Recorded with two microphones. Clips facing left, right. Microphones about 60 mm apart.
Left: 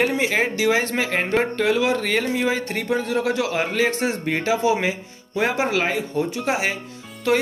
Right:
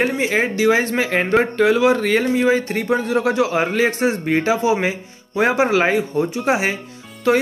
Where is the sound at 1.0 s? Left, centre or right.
Right.